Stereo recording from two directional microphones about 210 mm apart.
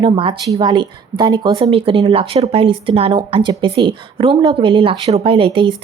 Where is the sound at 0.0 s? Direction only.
25° right (ahead or behind).